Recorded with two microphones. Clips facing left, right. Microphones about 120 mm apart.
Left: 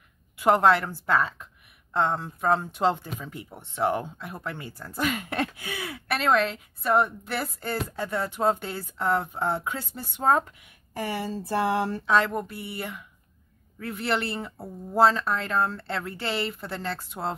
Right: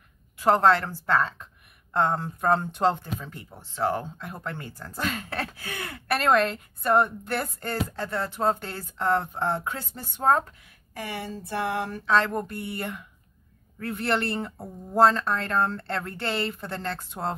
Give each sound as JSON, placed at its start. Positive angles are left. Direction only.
{"t": 0.4, "sound": "a woman's voice", "side_deg": 10}
{"t": 2.0, "sound": "a woman's voice", "side_deg": 0}
{"t": 5.7, "sound": "a woman's voice", "side_deg": 0}
{"t": 11.2, "sound": "speech", "side_deg": 30}
{"t": 12.1, "sound": "speech", "side_deg": 10}